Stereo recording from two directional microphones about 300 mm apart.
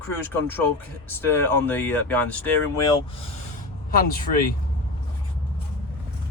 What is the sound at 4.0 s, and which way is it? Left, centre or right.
Speech, left.